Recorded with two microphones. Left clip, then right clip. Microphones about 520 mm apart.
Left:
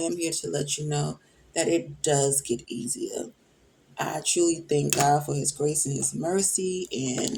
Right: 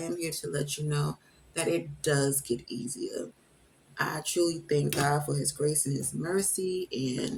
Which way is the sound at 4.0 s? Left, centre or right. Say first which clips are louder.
Left 3 dB; right.